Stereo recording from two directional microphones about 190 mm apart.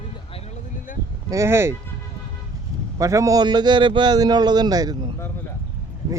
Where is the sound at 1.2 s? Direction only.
15° right (ahead or behind).